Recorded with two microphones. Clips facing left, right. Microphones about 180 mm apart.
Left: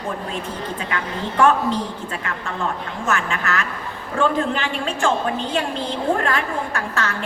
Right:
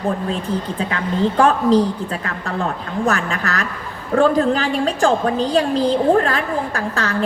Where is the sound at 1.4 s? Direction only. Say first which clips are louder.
Right 3 dB; 35° right (ahead or behind).